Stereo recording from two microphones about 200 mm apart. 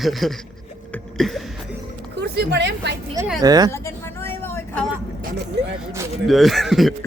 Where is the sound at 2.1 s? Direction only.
55° right (ahead or behind).